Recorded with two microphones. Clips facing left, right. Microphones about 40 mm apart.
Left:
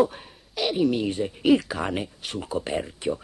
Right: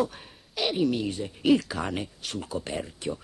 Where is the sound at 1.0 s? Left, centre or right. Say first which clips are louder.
Left 5 dB; left.